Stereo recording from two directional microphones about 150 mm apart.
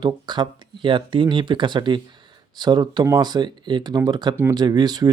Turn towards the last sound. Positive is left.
turn(degrees=-25)  # may be behind; listen again after turning